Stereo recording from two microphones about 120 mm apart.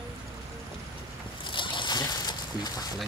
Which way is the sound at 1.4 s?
40° left (ahead or behind).